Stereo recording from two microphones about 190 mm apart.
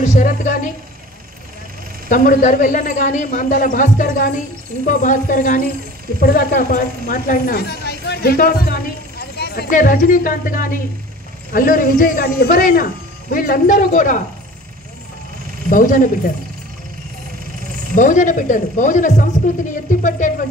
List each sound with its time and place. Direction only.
0.0 s speech: 35° left (ahead or behind)
2.0 s speech: 45° left (ahead or behind)
6.1 s a woman's voice: 55° left (ahead or behind)
15.7 s speech: 45° left (ahead or behind)
17.9 s speech: 40° left (ahead or behind)